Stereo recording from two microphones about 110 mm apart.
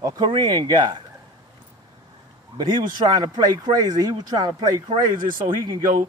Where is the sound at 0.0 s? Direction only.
35° right (ahead or behind).